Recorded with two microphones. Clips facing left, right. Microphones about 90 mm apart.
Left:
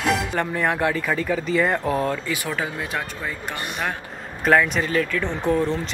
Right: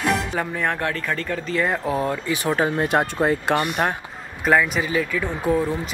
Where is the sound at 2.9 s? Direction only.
55° right (ahead or behind).